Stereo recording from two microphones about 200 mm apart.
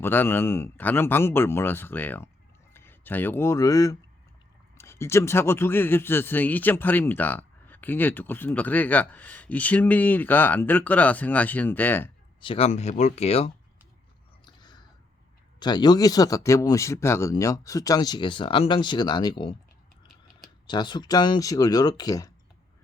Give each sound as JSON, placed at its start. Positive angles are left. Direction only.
{"t": 0.0, "sound": "a man's voice", "side_deg": 10}
{"t": 12.4, "sound": "speech", "side_deg": 25}
{"t": 14.4, "sound": "chewing", "side_deg": 20}
{"t": 15.5, "sound": "speech", "side_deg": 20}
{"t": 20.7, "sound": "speech", "side_deg": 20}